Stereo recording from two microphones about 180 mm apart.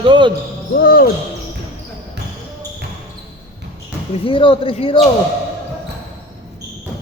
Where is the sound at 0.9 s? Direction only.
55° left (ahead or behind).